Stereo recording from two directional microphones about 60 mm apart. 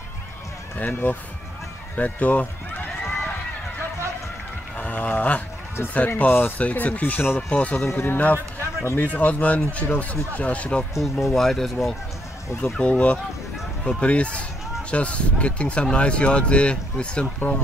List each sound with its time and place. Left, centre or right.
0.7 s speech: left
2.0 s run: left
4.7 s a sound: left
5.9 s speech: left
7.9 s speech: left
8.2 s speech: left
11.0 s speech: centre
12.7 s speech: centre